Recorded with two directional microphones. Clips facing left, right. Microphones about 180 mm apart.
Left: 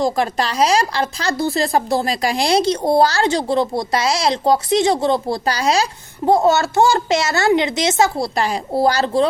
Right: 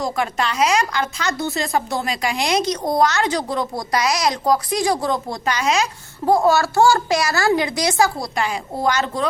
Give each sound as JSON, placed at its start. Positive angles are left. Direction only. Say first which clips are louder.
{"t": 0.0, "sound": "speech", "louder": "left 4 dB", "side_deg": 35}
{"t": 6.2, "sound": "a child's voice", "louder": "left 2 dB", "side_deg": 20}
{"t": 8.4, "sound": "speech", "louder": "left 5 dB", "side_deg": 35}